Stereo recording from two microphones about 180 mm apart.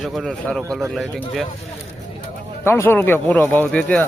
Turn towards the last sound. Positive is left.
turn(degrees=10)  # may be behind; listen again after turning